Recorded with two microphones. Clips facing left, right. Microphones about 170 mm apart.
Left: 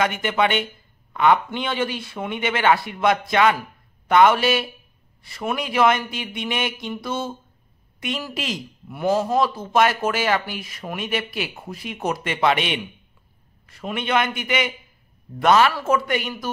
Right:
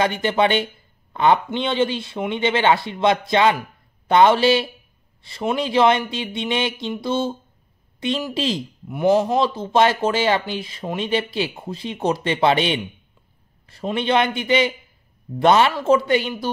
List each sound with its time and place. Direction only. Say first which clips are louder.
0.0 s speech: right 2 dB; 30° right (ahead or behind)